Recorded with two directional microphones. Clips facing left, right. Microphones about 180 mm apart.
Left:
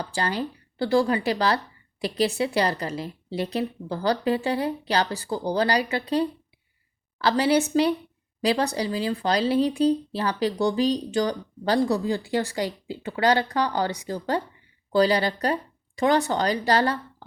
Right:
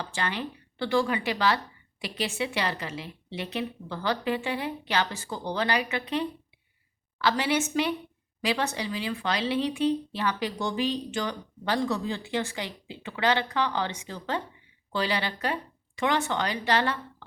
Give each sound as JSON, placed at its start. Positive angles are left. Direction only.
{"t": 0.0, "sound": "speech", "side_deg": 35}